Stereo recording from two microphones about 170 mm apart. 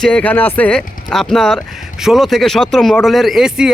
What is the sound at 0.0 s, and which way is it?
Speech, 10° left (ahead or behind).